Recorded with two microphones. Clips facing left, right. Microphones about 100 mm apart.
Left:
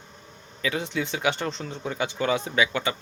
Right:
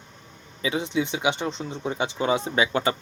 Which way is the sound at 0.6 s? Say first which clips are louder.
Right 3 dB; 20° right (ahead or behind).